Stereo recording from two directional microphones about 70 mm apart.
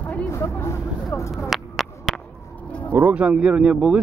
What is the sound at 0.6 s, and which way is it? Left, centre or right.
Vehicle, left.